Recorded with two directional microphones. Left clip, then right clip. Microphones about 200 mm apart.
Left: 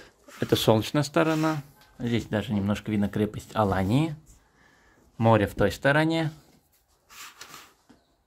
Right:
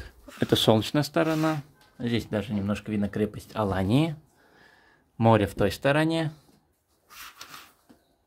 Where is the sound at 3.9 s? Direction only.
15° right (ahead or behind).